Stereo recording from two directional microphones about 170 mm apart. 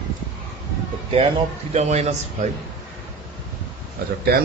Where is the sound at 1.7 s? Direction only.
40° right (ahead or behind).